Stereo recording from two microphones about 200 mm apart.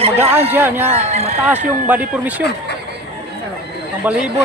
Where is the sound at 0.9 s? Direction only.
30° right (ahead or behind).